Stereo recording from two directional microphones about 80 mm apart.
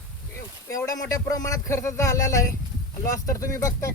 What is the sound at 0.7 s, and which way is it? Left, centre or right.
A man's voice, left.